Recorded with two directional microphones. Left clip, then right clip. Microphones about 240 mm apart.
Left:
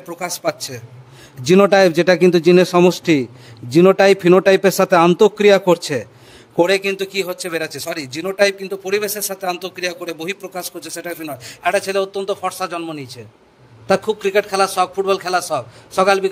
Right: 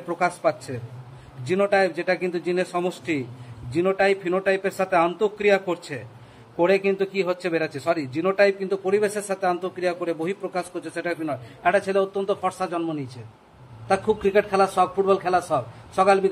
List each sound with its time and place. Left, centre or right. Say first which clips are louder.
1.5 s a man's voice: left 9 dB; left
9.0 s speech: even; centre
9.5 s a man's voice: left 3 dB; left
10.4 s speech: left 1 dB; centre
11.6 s a man's voice: left 3 dB; left